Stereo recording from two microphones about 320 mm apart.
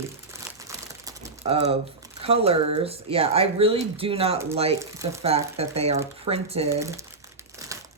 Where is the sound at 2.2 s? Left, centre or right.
Centre.